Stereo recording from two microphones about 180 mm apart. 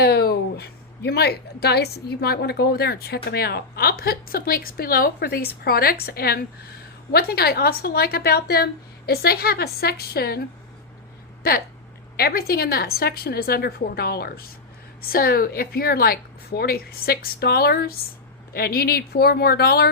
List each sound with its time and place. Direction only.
0.0 s a woman's voice: 60° left (ahead or behind)
12.1 s a woman's voice: 55° left (ahead or behind)